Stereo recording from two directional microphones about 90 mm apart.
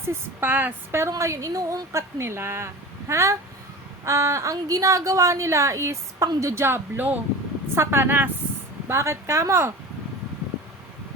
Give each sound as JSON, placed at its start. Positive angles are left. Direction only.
{"t": 0.0, "sound": "a woman's voice", "side_deg": -25}